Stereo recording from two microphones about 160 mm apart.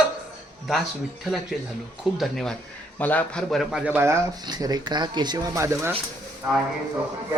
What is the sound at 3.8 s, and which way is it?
Speech, 15° right (ahead or behind).